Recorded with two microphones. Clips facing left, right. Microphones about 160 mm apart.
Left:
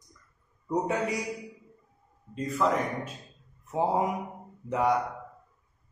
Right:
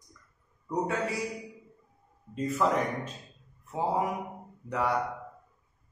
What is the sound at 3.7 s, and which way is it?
A man's voice, 20° left (ahead or behind).